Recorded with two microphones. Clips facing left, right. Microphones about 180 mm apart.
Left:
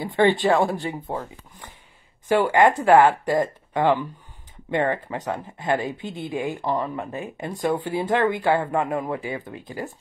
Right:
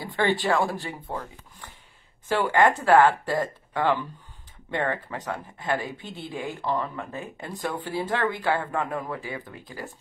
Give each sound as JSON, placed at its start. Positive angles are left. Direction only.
{"t": 0.0, "sound": "speech", "side_deg": 20}
{"t": 2.2, "sound": "speech", "side_deg": 15}